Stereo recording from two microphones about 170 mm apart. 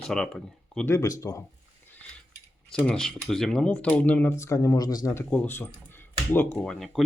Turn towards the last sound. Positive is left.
turn(degrees=0)  # may be behind; listen again after turning